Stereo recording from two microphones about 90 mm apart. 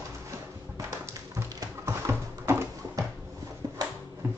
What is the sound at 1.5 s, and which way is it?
Clip-clop, 40° right (ahead or behind).